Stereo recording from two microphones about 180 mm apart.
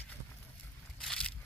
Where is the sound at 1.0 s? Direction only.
5° left (ahead or behind).